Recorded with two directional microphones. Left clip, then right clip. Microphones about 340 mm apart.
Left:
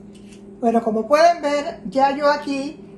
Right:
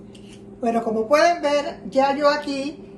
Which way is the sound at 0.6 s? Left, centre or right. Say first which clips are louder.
Left 3 dB; centre.